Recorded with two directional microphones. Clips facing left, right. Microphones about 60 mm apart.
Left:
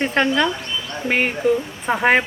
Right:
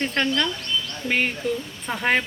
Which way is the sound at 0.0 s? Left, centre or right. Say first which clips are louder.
Left 5 dB; centre.